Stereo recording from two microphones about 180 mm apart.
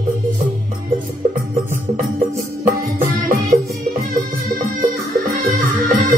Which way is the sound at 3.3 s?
50° right (ahead or behind).